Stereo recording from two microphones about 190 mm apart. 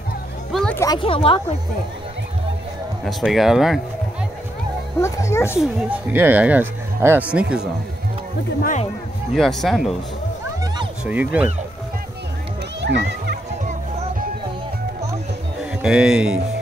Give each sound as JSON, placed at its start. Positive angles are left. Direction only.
{"t": 0.5, "sound": "a sound", "side_deg": 0}
{"t": 0.7, "sound": "speech", "side_deg": 20}
{"t": 3.1, "sound": "speech", "side_deg": 0}
{"t": 5.0, "sound": "speech", "side_deg": 15}
{"t": 5.6, "sound": "speech", "side_deg": -5}
{"t": 9.3, "sound": "speech", "side_deg": 0}
{"t": 11.1, "sound": "speech", "side_deg": -10}
{"t": 12.8, "sound": "children playing", "side_deg": -65}
{"t": 15.6, "sound": "speech", "side_deg": -5}